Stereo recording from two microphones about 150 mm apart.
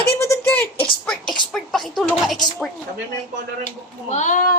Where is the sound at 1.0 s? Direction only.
5° left (ahead or behind).